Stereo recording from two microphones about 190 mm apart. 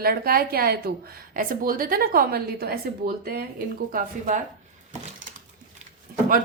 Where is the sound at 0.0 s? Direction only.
50° right (ahead or behind).